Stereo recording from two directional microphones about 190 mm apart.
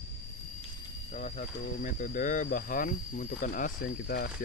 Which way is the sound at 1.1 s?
40° left (ahead or behind).